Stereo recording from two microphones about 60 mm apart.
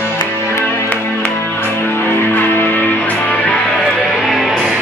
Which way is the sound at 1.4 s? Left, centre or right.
Left.